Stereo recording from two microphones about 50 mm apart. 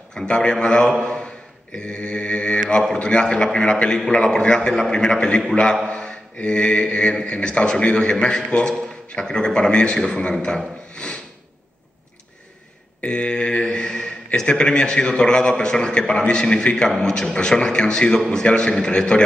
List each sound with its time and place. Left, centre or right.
0.1 s a man's voice: centre
1.8 s mantra: centre
3.8 s a man's voice: centre
5.9 s mantra: centre
7.2 s a man's voice: left
13.0 s a man's voice: left